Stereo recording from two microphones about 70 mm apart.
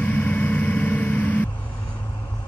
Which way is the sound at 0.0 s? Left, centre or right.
Left.